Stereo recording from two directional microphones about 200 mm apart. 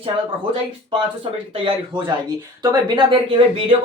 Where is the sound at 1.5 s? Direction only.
25° right (ahead or behind).